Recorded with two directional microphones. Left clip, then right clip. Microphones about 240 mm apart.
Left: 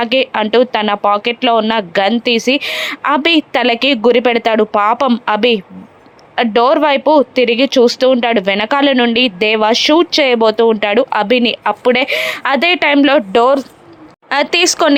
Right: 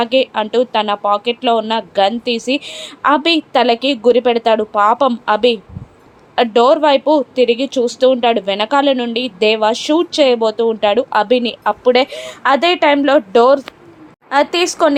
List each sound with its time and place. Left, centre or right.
0.0 s speech: left